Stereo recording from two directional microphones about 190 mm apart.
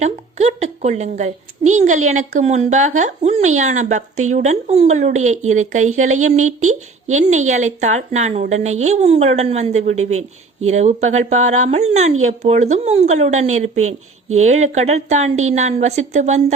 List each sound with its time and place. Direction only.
0.0 s a woman's voice: 35° right (ahead or behind)